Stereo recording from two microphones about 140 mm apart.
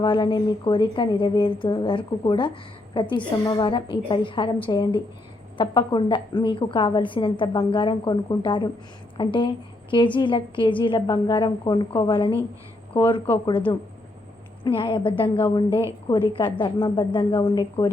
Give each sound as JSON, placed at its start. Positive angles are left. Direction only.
{"t": 0.0, "sound": "a woman's voice", "side_deg": 35}
{"t": 14.8, "sound": "a woman's voice", "side_deg": 40}